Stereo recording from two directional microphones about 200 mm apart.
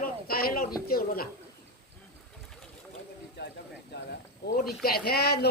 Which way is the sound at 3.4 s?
55° left (ahead or behind).